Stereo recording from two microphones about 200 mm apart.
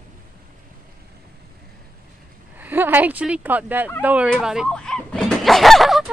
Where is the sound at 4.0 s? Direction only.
5° right (ahead or behind).